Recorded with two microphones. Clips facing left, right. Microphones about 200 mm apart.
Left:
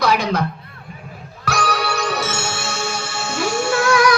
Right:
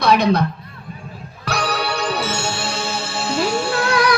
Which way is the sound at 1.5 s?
30° right (ahead or behind).